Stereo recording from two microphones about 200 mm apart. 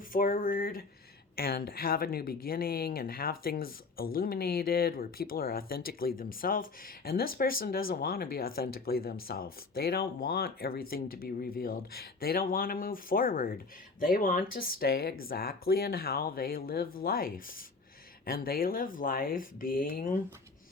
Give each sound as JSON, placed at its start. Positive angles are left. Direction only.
{"t": 0.1, "sound": "speech", "side_deg": 45}